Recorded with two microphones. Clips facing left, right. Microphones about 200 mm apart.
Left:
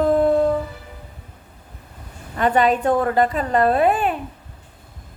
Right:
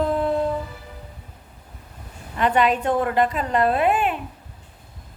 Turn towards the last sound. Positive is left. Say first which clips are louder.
# left 2 dB
turn(degrees=40)  # may be behind; listen again after turning